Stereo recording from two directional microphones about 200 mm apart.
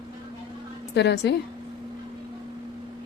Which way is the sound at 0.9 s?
60° left (ahead or behind).